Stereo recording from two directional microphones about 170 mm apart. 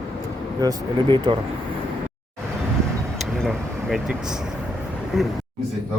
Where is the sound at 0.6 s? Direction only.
25° right (ahead or behind).